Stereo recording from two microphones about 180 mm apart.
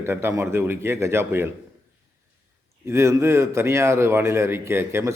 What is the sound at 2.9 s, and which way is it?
A man's voice, 15° right (ahead or behind).